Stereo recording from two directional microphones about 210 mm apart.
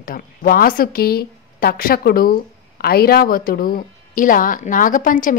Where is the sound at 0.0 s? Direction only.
45° left (ahead or behind).